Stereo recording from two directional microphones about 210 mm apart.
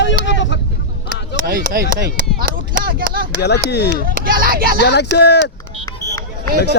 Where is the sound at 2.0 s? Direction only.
45° right (ahead or behind).